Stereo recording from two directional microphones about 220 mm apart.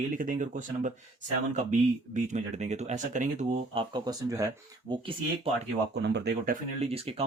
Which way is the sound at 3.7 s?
20° right (ahead or behind).